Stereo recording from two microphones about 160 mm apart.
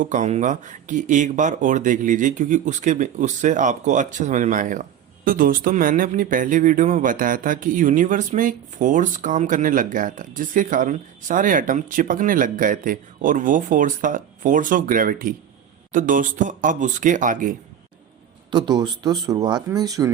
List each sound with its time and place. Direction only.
0.0 s speech: 50° right (ahead or behind)
18.5 s a man's voice: 30° right (ahead or behind)